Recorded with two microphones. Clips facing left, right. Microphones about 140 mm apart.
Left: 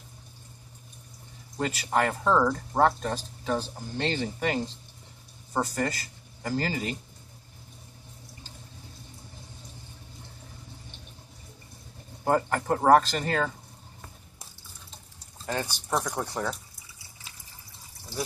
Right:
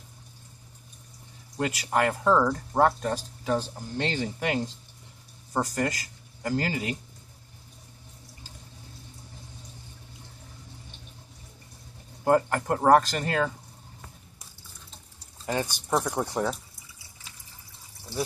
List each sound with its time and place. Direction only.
1.6 s speech: 5° right (ahead or behind)
12.3 s speech: 5° right (ahead or behind)
15.4 s speech: 15° right (ahead or behind)